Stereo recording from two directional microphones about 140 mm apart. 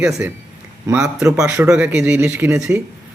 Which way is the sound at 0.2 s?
15° right (ahead or behind).